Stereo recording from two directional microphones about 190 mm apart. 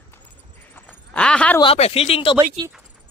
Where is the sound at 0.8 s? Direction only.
5° left (ahead or behind).